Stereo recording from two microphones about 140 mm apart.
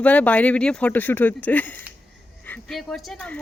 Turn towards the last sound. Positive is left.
turn(degrees=5)  # may be behind; listen again after turning